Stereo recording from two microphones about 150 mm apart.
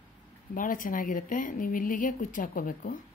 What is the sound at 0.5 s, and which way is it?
Speech, 65° left (ahead or behind).